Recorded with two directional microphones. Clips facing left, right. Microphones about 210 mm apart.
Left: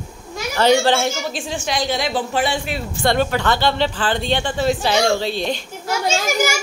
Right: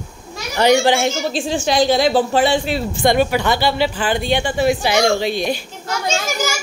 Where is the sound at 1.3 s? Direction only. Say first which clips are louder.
Right 7 dB; 30° right (ahead or behind).